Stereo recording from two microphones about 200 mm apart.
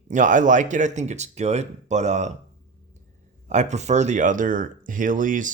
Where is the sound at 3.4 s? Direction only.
35° right (ahead or behind).